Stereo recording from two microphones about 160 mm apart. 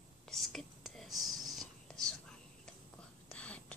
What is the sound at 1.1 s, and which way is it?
Speech, 25° right (ahead or behind).